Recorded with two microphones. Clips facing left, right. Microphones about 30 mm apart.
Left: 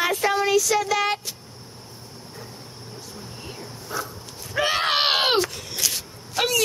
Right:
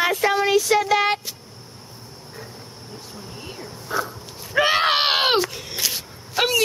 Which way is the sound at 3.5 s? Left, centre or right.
Centre.